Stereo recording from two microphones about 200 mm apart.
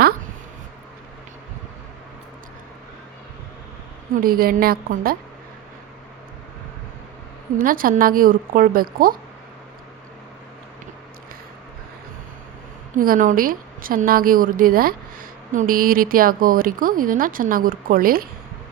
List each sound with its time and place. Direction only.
4.1 s a woman's voice: 45° right (ahead or behind)
7.6 s a woman's voice: 45° right (ahead or behind)
13.0 s a woman's voice: 45° right (ahead or behind)